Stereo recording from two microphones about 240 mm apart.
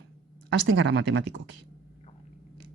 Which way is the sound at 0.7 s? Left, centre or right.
Right.